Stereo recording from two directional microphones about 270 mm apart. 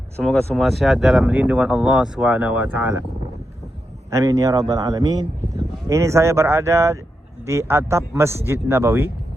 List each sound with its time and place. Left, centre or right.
0.2 s speech: centre
4.1 s a man's voice: centre